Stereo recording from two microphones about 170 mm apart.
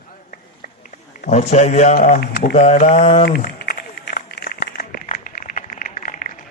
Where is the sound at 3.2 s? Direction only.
65° left (ahead or behind).